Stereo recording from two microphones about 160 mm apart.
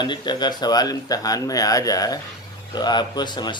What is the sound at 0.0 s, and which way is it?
Speech, 30° left (ahead or behind).